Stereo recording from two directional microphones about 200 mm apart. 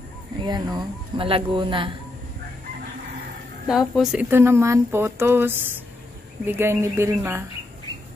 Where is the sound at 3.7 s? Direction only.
Centre (ahead or behind).